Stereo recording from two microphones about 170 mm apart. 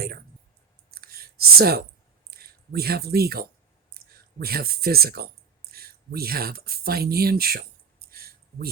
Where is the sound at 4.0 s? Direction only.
65° right (ahead or behind).